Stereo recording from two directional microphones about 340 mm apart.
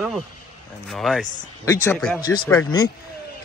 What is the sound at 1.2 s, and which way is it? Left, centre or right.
Speech, left.